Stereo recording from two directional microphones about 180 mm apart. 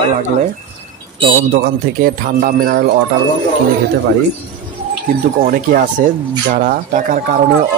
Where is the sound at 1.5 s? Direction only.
55° right (ahead or behind).